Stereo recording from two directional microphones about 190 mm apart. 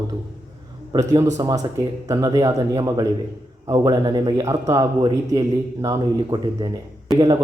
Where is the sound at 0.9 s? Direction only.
20° right (ahead or behind).